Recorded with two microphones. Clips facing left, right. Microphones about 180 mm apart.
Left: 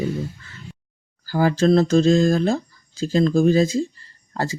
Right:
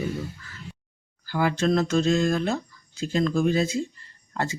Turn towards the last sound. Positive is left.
turn(degrees=35)  # may be behind; listen again after turning